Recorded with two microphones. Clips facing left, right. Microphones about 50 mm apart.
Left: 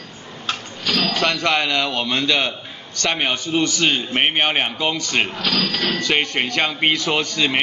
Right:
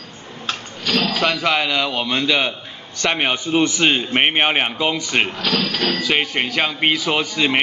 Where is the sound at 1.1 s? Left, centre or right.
Centre.